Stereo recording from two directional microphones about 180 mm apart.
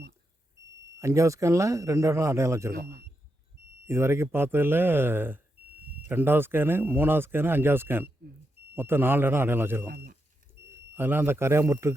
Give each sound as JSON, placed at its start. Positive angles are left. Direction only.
{"t": 0.9, "sound": "speech", "side_deg": -15}
{"t": 3.8, "sound": "speech", "side_deg": -15}
{"t": 9.8, "sound": "speech", "side_deg": -55}
{"t": 10.9, "sound": "speech", "side_deg": -10}